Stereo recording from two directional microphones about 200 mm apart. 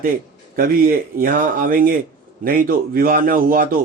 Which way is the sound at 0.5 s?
45° right (ahead or behind).